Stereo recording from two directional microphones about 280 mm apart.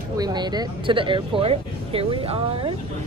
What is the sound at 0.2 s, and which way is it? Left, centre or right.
Speech, centre.